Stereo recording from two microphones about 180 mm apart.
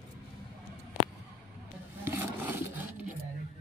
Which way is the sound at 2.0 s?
10° right (ahead or behind).